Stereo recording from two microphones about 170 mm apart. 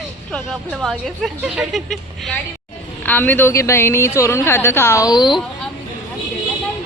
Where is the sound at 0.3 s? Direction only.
Centre (ahead or behind).